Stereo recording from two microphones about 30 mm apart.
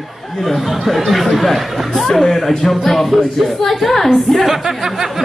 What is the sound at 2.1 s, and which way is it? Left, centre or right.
A man's voice, centre.